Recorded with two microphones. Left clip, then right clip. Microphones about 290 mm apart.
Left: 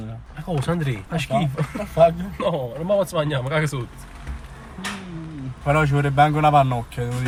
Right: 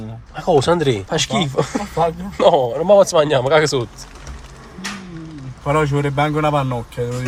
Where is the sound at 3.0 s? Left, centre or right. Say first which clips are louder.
Right 10 dB; right.